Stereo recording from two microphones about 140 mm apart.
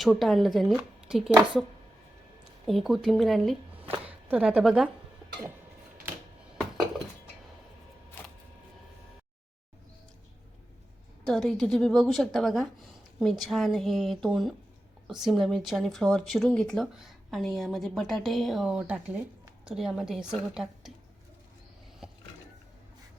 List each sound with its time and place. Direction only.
0.0 s speech: centre (ahead or behind)
2.6 s speech: centre (ahead or behind)
3.8 s a sound: 45° right (ahead or behind)
4.3 s speech: 10° right (ahead or behind)
11.3 s speech: centre (ahead or behind)